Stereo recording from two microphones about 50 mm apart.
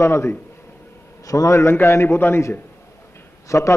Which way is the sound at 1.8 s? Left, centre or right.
Left.